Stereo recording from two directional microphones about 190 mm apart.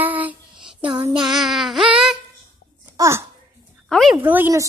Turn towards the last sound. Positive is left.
turn(degrees=-10)  # may be behind; listen again after turning